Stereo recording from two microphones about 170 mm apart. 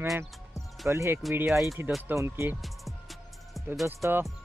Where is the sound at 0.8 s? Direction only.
15° right (ahead or behind).